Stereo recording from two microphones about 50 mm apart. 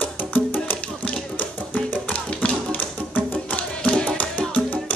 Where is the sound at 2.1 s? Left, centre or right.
Left.